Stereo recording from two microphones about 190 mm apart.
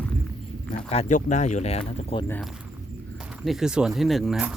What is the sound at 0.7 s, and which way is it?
Speech, 35° left (ahead or behind).